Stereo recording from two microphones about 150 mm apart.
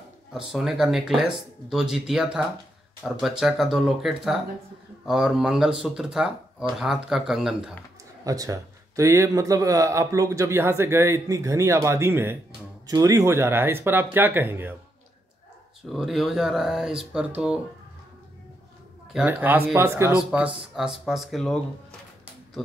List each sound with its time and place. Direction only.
0.3 s speech: 5° right (ahead or behind)
8.2 s a man's voice: 25° right (ahead or behind)
15.9 s speech: centre (ahead or behind)
19.1 s speech: 10° right (ahead or behind)
20.1 s speech: 5° right (ahead or behind)